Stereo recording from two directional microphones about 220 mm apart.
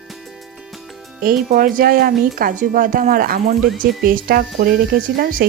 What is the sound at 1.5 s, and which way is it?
Speech, 40° right (ahead or behind).